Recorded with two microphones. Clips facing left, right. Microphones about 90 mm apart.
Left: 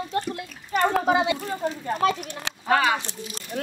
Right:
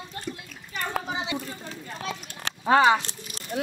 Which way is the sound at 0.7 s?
60° left (ahead or behind).